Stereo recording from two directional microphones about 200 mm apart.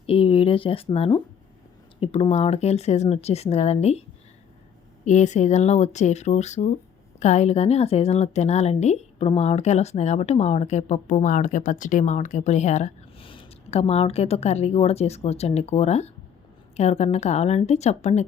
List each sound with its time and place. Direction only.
0.1 s a woman's voice: 30° left (ahead or behind)
5.0 s a woman's voice: 35° left (ahead or behind)